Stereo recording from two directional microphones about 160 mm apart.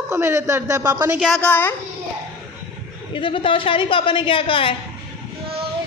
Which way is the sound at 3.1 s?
30° left (ahead or behind).